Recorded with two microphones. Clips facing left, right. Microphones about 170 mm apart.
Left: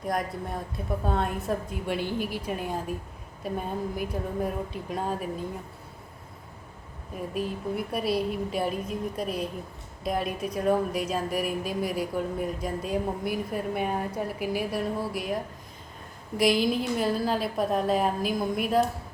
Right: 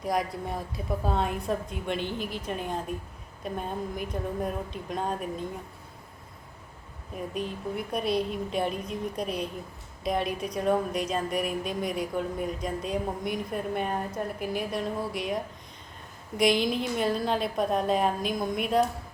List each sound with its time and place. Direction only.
0.0 s a woman's voice: centre (ahead or behind)
7.2 s a woman's voice: 5° left (ahead or behind)
16.4 s a woman's voice: centre (ahead or behind)